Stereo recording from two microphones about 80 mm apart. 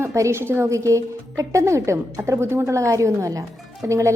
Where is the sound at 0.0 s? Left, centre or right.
Right.